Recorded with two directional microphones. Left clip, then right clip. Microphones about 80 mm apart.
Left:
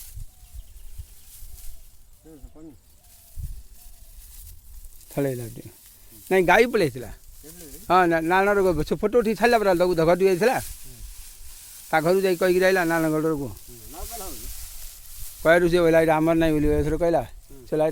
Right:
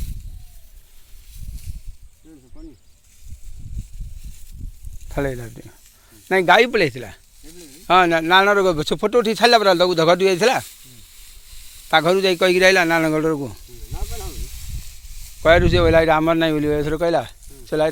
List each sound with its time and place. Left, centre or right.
5.0 s speech: left
6.2 s a man's voice: left
6.7 s a man's voice: centre
12.4 s a man's voice: right
15.4 s speech: left
16.0 s a man's voice: centre